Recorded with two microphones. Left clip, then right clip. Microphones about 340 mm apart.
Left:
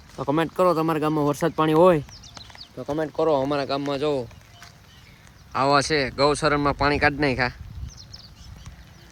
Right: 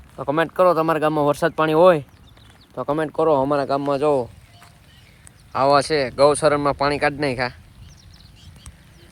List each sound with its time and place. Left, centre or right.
0.2 s speech: centre
2.9 s speech: right
5.5 s speech: centre